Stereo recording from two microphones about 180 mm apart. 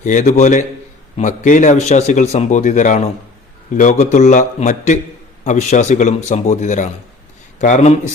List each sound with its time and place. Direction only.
0.0 s a man's voice: 45° left (ahead or behind)